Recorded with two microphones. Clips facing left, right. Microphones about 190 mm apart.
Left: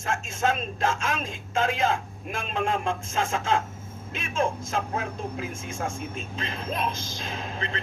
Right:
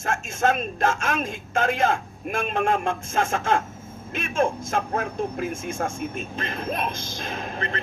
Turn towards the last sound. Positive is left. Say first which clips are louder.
# right 3 dB
turn(degrees=-55)  # may be behind; listen again after turning